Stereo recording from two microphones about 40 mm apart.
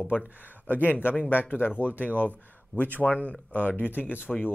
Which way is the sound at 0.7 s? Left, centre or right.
Left.